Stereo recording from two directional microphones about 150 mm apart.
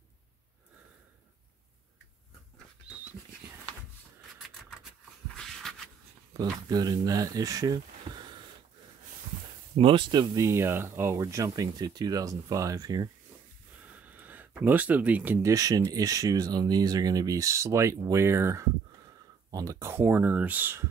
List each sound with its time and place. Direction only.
5.3 s a sound: 5° left (ahead or behind)
6.3 s speech: 25° right (ahead or behind)
9.8 s speech: 35° right (ahead or behind)
10.3 s speech: 20° right (ahead or behind)
14.0 s speech: 10° right (ahead or behind)